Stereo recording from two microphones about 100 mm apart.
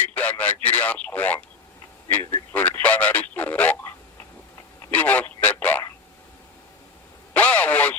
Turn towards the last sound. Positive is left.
turn(degrees=15)  # may be behind; listen again after turning